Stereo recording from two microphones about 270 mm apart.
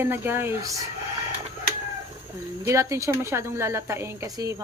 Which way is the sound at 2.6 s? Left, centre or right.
Centre.